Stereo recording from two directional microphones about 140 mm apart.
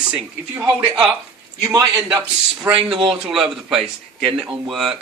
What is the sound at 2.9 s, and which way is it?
Speech, 40° right (ahead or behind).